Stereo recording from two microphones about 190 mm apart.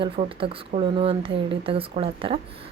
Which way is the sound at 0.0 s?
30° right (ahead or behind).